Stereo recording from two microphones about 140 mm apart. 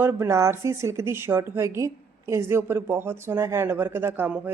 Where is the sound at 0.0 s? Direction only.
20° right (ahead or behind).